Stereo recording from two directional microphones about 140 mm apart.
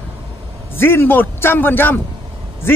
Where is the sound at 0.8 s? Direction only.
15° left (ahead or behind).